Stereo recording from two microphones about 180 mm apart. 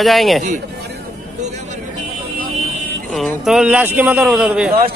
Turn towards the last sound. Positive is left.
turn(degrees=-5)  # may be behind; listen again after turning